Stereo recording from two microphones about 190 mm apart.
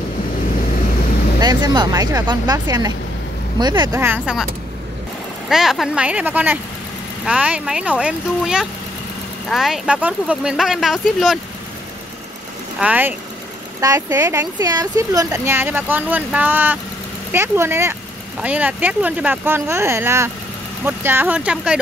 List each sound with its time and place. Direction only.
1.4 s speech: 20° right (ahead or behind)
4.0 s speech: 10° right (ahead or behind)
5.5 s speech: centre (ahead or behind)
12.8 s speech: 10° right (ahead or behind)